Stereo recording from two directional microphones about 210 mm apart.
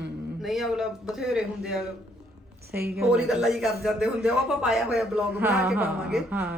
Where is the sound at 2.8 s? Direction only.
50° right (ahead or behind).